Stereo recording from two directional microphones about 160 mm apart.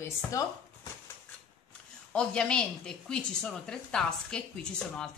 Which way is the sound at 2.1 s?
5° left (ahead or behind).